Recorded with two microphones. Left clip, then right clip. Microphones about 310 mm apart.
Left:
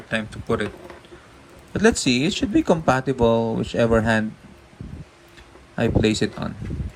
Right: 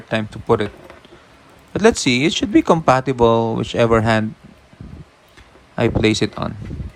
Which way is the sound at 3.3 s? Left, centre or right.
Left.